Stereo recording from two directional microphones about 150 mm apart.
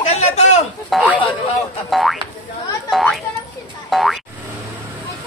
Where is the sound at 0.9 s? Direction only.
Centre (ahead or behind).